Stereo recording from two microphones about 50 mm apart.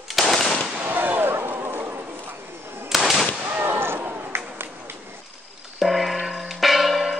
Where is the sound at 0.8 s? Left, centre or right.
Right.